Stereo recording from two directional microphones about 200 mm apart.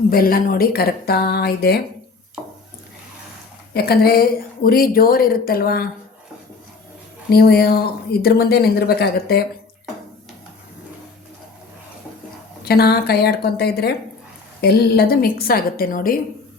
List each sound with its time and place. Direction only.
0.1 s a woman's voice: 45° left (ahead or behind)
2.4 s a sound: 5° right (ahead or behind)
3.8 s a woman's voice: 50° left (ahead or behind)
7.3 s a woman's voice: 50° left (ahead or behind)
12.6 s a woman's voice: 50° left (ahead or behind)